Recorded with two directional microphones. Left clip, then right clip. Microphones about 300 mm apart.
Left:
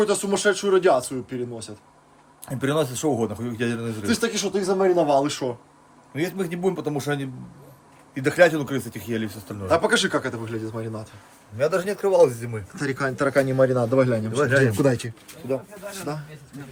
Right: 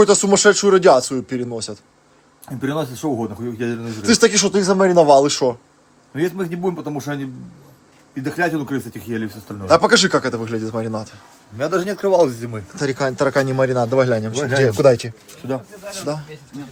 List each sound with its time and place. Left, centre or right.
0.0 s speech: right
2.6 s a man's voice: centre
4.0 s a man's voice: right; by 9.6 s centre
9.6 s speech: centre
13.3 s a man's voice: right
13.9 s speech: centre